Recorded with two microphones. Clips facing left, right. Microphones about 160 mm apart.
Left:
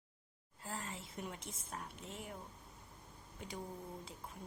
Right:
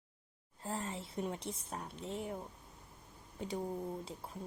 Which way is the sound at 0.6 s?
35° right (ahead or behind).